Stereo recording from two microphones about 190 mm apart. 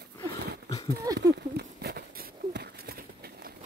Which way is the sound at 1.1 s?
60° right (ahead or behind).